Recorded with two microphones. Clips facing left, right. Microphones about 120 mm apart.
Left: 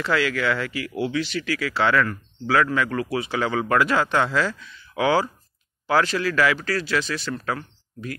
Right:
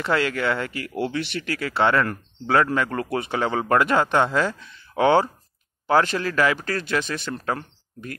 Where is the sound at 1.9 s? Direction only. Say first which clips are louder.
Even; 30° right (ahead or behind).